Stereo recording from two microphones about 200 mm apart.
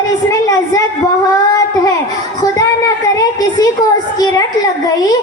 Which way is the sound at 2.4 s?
20° left (ahead or behind).